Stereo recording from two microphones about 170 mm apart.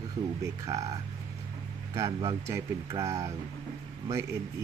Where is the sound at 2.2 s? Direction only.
15° right (ahead or behind).